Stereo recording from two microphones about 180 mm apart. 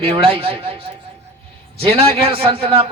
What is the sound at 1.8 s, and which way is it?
A man's voice, 30° right (ahead or behind).